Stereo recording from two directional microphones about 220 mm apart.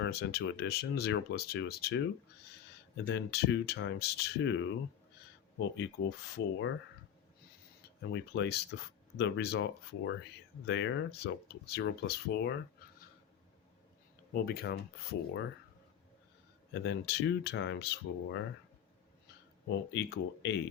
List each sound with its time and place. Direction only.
0.0 s speech: 50° left (ahead or behind)
3.1 s speech: 50° left (ahead or behind)
8.1 s speech: 50° left (ahead or behind)
14.3 s speech: 45° left (ahead or behind)
16.8 s speech: 50° left (ahead or behind)
19.9 s speech: 55° left (ahead or behind)